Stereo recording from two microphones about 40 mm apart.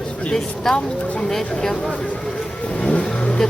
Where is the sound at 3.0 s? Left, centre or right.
Left.